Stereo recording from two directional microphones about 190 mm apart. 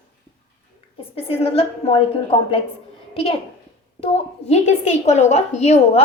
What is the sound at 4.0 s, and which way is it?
A woman's voice, 35° left (ahead or behind).